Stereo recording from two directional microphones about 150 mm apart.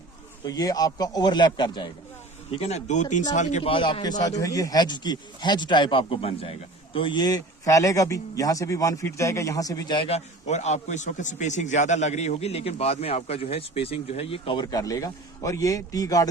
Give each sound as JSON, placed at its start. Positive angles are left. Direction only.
{"t": 0.4, "sound": "speech", "side_deg": 25}
{"t": 2.5, "sound": "a man's voice", "side_deg": 45}
{"t": 3.6, "sound": "a man's voice", "side_deg": 35}
{"t": 4.2, "sound": "speech", "side_deg": 25}
{"t": 10.0, "sound": "a man's voice", "side_deg": 45}